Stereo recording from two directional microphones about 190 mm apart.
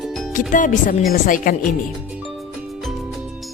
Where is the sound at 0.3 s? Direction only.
45° left (ahead or behind).